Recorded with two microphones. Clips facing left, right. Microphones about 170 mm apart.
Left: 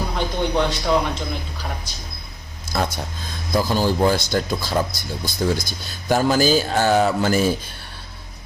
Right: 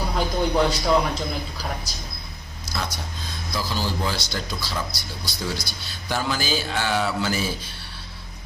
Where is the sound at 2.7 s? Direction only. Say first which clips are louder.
Left 7 dB; 50° left (ahead or behind).